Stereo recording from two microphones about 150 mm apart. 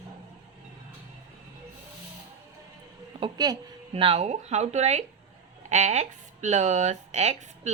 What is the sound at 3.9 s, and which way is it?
Speech, 40° right (ahead or behind).